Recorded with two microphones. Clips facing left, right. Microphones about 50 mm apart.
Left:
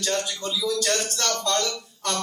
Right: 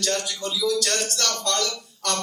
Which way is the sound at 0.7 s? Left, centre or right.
Centre.